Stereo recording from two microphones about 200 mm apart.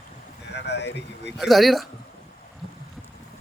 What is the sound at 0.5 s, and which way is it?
Speech, 60° left (ahead or behind).